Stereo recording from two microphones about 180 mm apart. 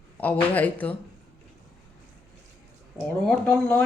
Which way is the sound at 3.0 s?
Centre (ahead or behind).